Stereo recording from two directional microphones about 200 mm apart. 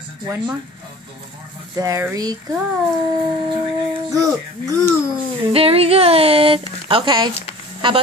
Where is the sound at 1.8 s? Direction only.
15° right (ahead or behind).